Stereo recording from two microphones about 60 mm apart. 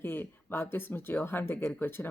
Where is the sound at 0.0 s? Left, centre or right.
Left.